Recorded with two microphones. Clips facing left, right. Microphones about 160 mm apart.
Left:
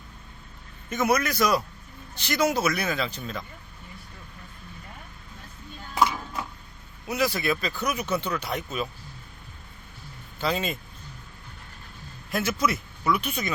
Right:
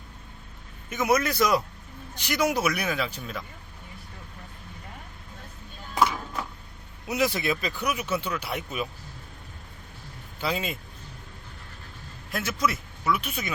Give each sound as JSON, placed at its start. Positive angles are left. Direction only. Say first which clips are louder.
{"t": 0.9, "sound": "a man's voice", "louder": "left 2 dB", "side_deg": -10}
{"t": 1.1, "sound": "a man's voice", "louder": "right 2 dB", "side_deg": -25}
{"t": 7.1, "sound": "speech", "louder": "even", "side_deg": -20}
{"t": 10.4, "sound": "speech", "louder": "left 2 dB", "side_deg": -10}
{"t": 12.3, "sound": "speech", "louder": "left 2 dB", "side_deg": 0}